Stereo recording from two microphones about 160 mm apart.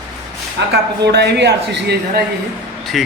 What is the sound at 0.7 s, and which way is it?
Speech, 90° right.